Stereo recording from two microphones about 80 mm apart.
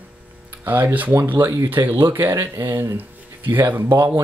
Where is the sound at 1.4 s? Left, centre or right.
Right.